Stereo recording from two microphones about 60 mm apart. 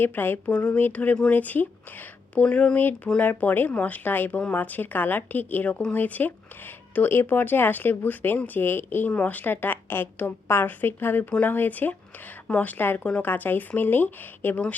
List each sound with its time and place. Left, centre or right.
0.0 s speech: left
0.5 s speech: left
0.8 s speech: left
3.2 s speech: left
9.1 s speech: left
11.3 s speech: left